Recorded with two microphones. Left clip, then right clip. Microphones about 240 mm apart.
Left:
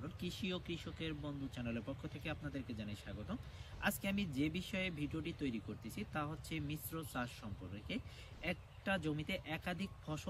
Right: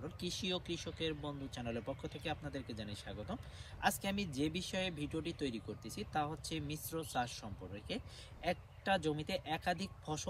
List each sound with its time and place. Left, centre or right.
0.2 s speech: centre